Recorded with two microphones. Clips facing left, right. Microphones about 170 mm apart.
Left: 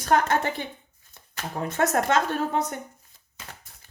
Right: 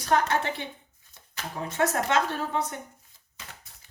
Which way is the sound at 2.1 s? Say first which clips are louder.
Left 1 dB; 45° left (ahead or behind).